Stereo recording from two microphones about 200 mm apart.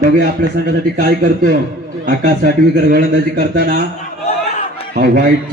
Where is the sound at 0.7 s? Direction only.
45° right (ahead or behind).